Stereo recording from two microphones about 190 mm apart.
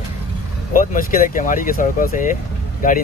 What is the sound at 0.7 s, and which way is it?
Speech, 45° left (ahead or behind).